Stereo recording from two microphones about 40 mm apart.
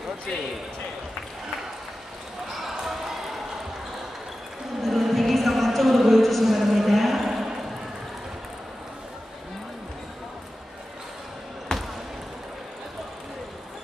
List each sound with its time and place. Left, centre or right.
2.5 s basketball bounce: centre
4.8 s a sound: centre
11.7 s basketball bounce: centre